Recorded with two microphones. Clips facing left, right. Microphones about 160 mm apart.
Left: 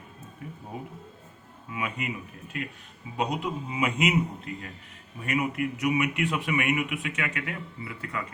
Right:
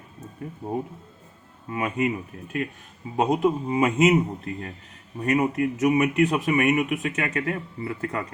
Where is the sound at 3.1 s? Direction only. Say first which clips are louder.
Right 8 dB; 45° right (ahead or behind).